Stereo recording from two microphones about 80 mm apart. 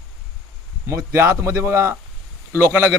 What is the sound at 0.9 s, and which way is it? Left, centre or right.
A man's voice, right.